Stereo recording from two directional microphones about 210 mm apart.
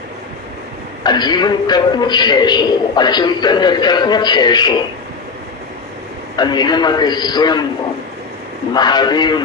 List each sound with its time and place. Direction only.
1.0 s a man's voice: 20° left (ahead or behind)
6.3 s a man's voice: 20° left (ahead or behind)
8.7 s a man's voice: 20° left (ahead or behind)